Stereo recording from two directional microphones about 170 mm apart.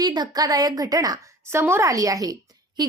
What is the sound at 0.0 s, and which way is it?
A woman's voice, 25° right (ahead or behind).